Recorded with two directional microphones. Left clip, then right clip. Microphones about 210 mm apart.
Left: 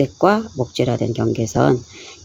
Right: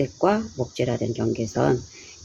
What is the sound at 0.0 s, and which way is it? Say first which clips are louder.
Speech: left 6 dB; 35° left (ahead or behind).